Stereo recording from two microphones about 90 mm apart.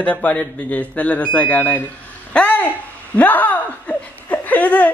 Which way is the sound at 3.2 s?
20° left (ahead or behind).